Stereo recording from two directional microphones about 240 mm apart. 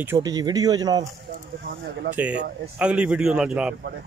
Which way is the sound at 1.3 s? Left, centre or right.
Right.